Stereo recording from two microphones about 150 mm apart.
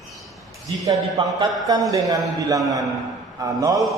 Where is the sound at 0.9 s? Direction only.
25° right (ahead or behind).